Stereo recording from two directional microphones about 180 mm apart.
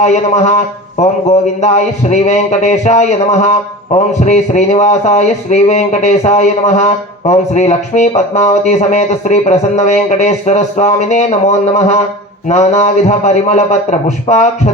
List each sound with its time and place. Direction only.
0.0 s speech: 40° left (ahead or behind)